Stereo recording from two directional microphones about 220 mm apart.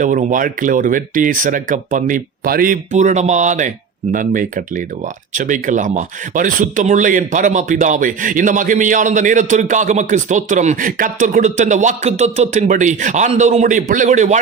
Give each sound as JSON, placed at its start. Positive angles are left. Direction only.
{"t": 0.0, "sound": "speech", "side_deg": -35}